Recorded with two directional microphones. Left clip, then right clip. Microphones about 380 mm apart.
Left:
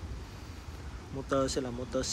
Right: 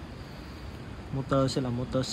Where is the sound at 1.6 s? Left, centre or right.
Right.